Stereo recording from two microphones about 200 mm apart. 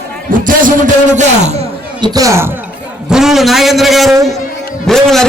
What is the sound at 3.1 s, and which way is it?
A man's voice, centre (ahead or behind).